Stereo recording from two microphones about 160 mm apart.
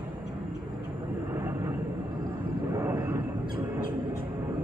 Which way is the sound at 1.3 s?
15° right (ahead or behind).